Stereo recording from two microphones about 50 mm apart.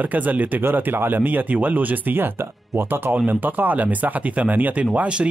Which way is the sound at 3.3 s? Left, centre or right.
Right.